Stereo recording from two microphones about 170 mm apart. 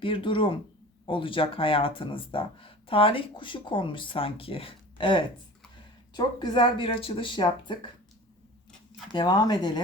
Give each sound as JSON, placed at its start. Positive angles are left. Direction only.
{"t": 0.0, "sound": "speech", "side_deg": 30}
{"t": 9.1, "sound": "speech", "side_deg": 25}